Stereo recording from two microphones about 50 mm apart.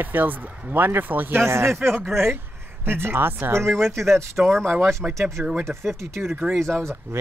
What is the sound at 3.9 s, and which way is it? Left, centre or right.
Speech, right.